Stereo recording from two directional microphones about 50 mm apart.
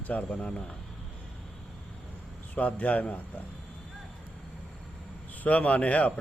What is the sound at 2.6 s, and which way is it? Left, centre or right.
Speech, left.